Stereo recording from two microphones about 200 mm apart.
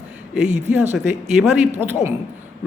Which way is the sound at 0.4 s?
35° right (ahead or behind).